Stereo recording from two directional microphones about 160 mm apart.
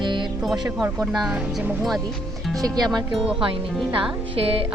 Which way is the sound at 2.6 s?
25° right (ahead or behind).